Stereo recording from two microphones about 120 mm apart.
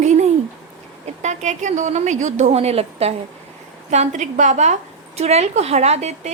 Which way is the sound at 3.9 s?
80° right.